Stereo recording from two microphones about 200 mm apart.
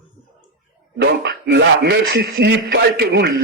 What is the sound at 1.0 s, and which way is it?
Speech, 60° right (ahead or behind).